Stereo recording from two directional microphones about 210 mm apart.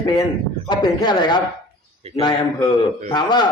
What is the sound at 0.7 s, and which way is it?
A man's voice, 20° left (ahead or behind).